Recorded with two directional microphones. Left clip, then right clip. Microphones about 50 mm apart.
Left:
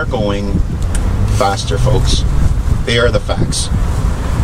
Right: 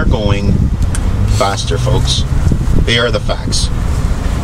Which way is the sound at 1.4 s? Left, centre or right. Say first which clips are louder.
Left 1 dB; centre.